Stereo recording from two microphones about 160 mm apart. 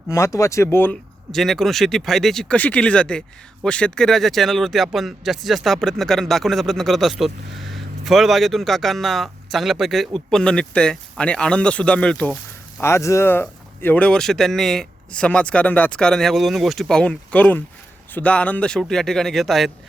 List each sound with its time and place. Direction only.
0.1 s speech: 20° left (ahead or behind)
1.3 s speech: centre (ahead or behind)
12.8 s speech: 20° left (ahead or behind); by 19.7 s centre (ahead or behind)